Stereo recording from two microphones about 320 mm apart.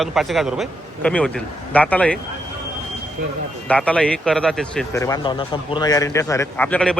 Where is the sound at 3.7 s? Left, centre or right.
Centre.